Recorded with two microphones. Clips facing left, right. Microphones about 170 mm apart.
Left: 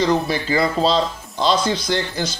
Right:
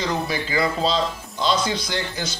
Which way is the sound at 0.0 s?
35° left (ahead or behind).